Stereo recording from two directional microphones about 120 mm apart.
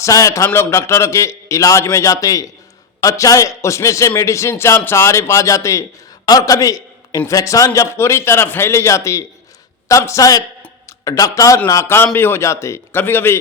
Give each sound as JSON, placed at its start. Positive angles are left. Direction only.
{"t": 0.0, "sound": "a man's voice", "side_deg": 25}